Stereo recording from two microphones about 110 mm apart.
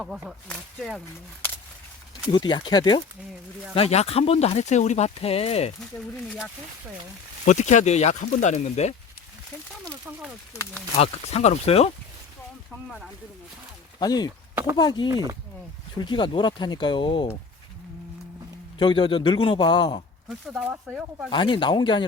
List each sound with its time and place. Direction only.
0.4 s speech: 5° left (ahead or behind)
2.3 s speech: 40° left (ahead or behind)
3.8 s speech: 70° left (ahead or behind)
7.5 s speech: 90° left
10.1 s speech: 10° right (ahead or behind)
10.9 s speech: 70° left (ahead or behind)
14.0 s speech: 35° left (ahead or behind)
15.1 s speech: 30° right (ahead or behind)
16.0 s speech: 45° left (ahead or behind)
18.8 s speech: 45° left (ahead or behind)
20.2 s speech: 5° right (ahead or behind)
21.2 s speech: 45° left (ahead or behind)